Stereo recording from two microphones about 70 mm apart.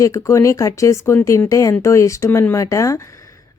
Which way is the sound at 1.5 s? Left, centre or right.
Left.